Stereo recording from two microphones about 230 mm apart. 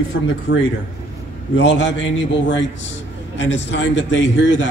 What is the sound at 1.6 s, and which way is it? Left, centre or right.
A man's voice, left.